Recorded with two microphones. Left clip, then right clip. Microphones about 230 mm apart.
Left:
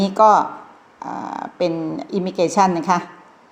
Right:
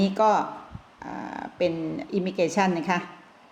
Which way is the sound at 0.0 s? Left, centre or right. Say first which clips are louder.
Left 8 dB; centre.